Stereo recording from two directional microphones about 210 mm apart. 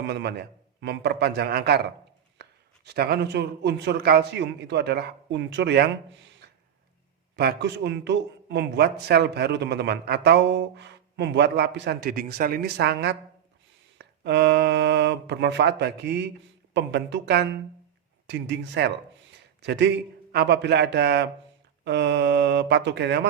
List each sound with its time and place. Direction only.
0.1 s a man's voice: 50° right (ahead or behind)
7.3 s a man's voice: 55° right (ahead or behind)